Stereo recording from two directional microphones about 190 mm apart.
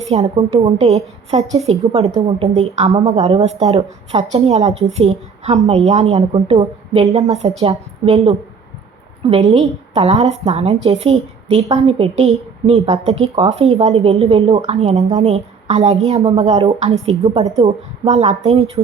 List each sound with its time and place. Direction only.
0.1 s a woman's voice: 30° right (ahead or behind)